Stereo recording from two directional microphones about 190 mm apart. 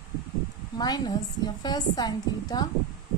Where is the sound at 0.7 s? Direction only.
20° left (ahead or behind).